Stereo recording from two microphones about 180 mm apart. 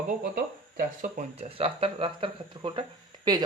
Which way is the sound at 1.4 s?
30° right (ahead or behind).